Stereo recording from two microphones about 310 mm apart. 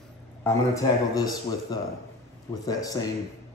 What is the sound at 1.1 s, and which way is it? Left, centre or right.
Speech, centre.